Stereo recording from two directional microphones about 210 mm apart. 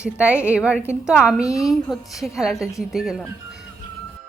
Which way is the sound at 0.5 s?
5° right (ahead or behind).